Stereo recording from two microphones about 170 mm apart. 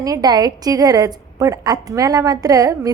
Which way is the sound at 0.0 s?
20° right (ahead or behind).